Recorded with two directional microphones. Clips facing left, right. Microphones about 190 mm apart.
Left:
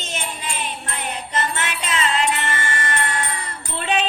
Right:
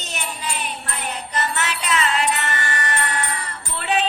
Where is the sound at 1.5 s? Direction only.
25° left (ahead or behind).